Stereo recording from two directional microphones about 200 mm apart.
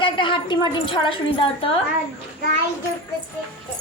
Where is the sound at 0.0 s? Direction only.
25° left (ahead or behind).